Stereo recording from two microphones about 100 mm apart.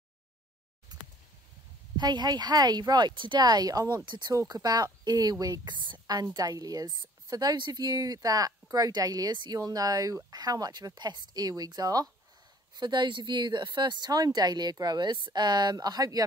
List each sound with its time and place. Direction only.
2.0 s speech: 45° right (ahead or behind)
4.3 s speech: 35° right (ahead or behind)